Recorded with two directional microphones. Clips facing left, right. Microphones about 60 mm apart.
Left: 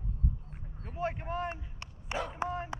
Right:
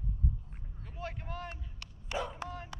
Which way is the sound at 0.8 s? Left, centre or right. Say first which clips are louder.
Left 7 dB; left.